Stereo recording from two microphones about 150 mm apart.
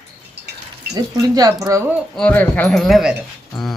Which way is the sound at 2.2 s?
10° left (ahead or behind).